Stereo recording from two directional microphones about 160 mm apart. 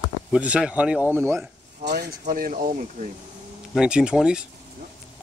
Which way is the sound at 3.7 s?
5° right (ahead or behind).